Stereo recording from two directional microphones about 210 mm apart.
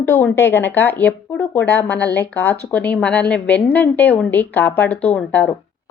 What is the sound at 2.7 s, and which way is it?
A woman's voice, 5° left (ahead or behind).